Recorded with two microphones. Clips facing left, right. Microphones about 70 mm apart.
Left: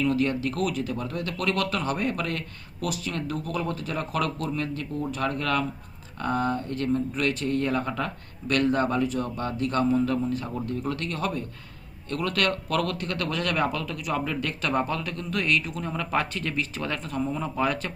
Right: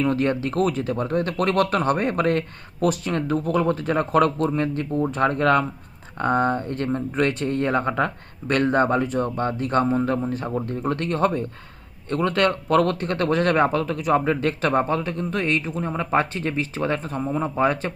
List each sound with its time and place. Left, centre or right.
0.0 s speech: right